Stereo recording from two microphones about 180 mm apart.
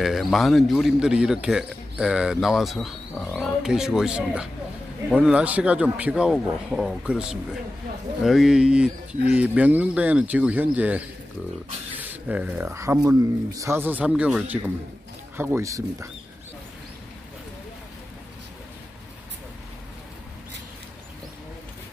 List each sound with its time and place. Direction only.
0.0 s speech: centre (ahead or behind)
12.0 s speech: 10° right (ahead or behind)